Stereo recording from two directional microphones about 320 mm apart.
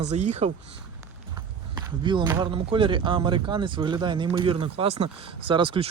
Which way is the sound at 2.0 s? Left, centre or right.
Centre.